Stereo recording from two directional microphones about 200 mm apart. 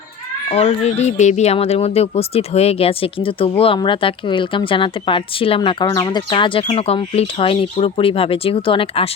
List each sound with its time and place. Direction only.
0.5 s speech: 35° left (ahead or behind)